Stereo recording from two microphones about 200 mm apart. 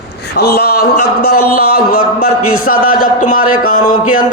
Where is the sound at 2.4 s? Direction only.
90° left.